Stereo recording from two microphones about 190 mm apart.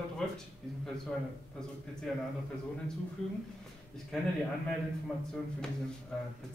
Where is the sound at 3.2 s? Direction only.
Centre (ahead or behind).